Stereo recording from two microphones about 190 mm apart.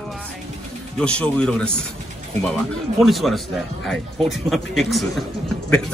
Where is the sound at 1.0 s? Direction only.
5° left (ahead or behind).